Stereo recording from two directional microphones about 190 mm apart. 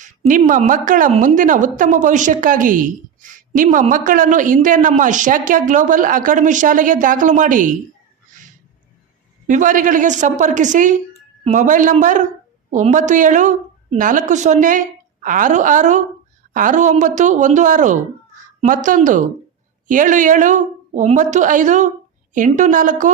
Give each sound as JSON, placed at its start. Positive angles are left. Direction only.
{"t": 0.0, "sound": "a woman's voice", "side_deg": -40}
{"t": 9.5, "sound": "a woman's voice", "side_deg": -40}